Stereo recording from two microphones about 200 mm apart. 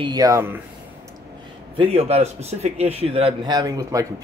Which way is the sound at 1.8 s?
30° right (ahead or behind).